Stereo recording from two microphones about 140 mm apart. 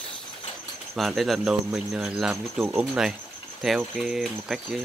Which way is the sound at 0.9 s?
Centre (ahead or behind).